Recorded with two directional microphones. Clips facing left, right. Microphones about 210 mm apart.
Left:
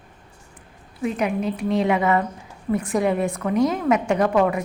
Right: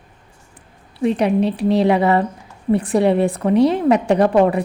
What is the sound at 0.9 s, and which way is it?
A woman's voice, 30° right (ahead or behind).